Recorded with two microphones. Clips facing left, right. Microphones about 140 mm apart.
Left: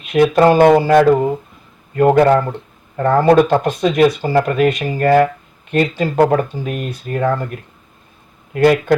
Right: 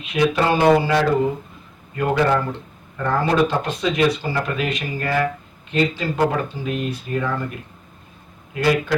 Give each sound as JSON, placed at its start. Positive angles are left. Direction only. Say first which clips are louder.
{"t": 0.0, "sound": "speech", "louder": "left 8 dB", "side_deg": 50}
{"t": 8.5, "sound": "speech", "louder": "left 7 dB", "side_deg": 55}